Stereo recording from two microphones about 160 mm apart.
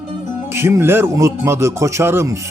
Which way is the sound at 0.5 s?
15° right (ahead or behind).